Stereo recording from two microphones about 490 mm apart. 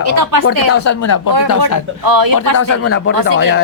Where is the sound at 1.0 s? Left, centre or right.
Left.